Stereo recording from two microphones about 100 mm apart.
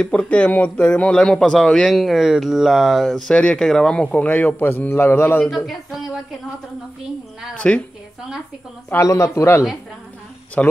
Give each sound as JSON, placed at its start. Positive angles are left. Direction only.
{"t": 0.0, "sound": "a man's voice", "side_deg": 10}
{"t": 5.7, "sound": "speech", "side_deg": -5}
{"t": 7.5, "sound": "a man's voice", "side_deg": 15}
{"t": 8.9, "sound": "a man's voice", "side_deg": 30}
{"t": 10.6, "sound": "a man's voice", "side_deg": 15}